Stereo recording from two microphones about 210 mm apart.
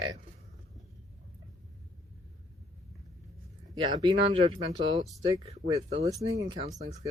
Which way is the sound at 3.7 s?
20° right (ahead or behind).